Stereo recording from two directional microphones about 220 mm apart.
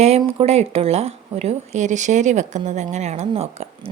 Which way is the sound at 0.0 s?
25° right (ahead or behind).